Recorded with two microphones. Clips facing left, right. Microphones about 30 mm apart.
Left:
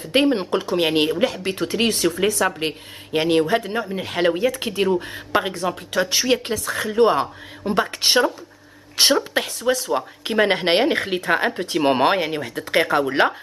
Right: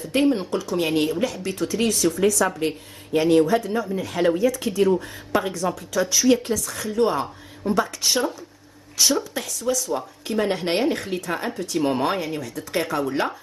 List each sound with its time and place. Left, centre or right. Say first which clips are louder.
0.1 s speech: left 2 dB; left